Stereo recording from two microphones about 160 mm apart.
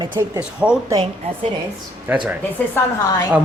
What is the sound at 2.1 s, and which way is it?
Speech, 10° right (ahead or behind).